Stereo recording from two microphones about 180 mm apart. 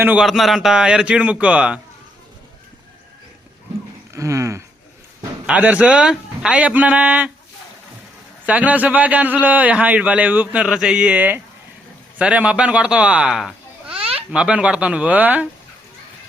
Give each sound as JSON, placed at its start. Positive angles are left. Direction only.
{"t": 0.0, "sound": "speech", "side_deg": -5}
{"t": 4.1, "sound": "speech", "side_deg": -15}
{"t": 5.5, "sound": "a man's voice", "side_deg": -5}
{"t": 8.4, "sound": "a man's voice", "side_deg": -10}
{"t": 13.9, "sound": "a sound", "side_deg": -30}
{"t": 14.3, "sound": "a man's voice", "side_deg": -5}